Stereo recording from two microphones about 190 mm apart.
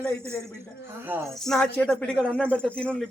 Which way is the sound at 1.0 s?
10° right (ahead or behind).